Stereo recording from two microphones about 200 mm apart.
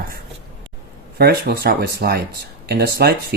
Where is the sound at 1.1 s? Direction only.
50° right (ahead or behind).